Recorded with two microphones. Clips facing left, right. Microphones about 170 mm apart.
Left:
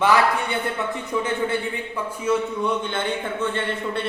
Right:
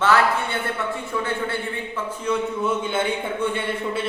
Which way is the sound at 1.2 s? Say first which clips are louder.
Left 3 dB; 20° left (ahead or behind).